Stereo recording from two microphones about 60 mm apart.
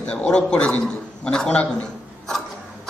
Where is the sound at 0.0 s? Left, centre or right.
Centre.